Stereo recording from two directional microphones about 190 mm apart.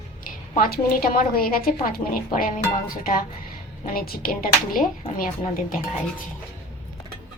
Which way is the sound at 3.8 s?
50° left (ahead or behind).